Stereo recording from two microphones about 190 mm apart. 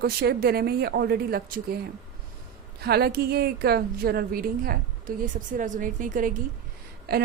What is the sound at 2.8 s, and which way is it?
Speech, 55° right (ahead or behind).